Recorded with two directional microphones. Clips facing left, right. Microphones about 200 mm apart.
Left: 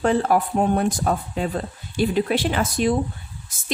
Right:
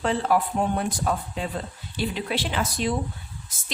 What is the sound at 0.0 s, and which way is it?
A woman's voice, 45° left (ahead or behind).